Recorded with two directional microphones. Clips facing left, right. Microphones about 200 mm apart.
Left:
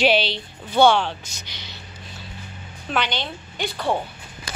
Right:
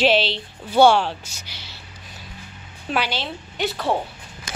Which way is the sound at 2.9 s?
5° right (ahead or behind).